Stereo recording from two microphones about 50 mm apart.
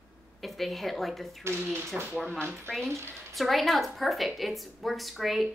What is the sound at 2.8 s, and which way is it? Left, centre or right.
Speech, right.